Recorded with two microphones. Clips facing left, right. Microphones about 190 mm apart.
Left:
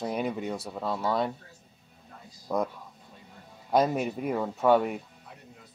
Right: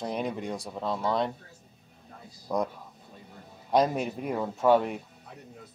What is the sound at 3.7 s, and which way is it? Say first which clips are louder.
Speech: even; 5° left (ahead or behind).